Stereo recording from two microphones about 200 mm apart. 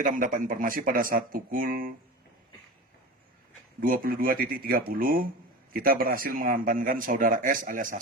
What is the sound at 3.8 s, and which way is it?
Speech, 45° right (ahead or behind).